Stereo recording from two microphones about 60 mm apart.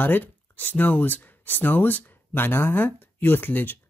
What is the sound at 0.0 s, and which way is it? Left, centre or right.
Speech, left.